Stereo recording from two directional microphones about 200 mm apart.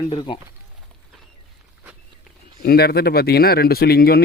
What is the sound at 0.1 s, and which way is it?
Speech, 20° left (ahead or behind).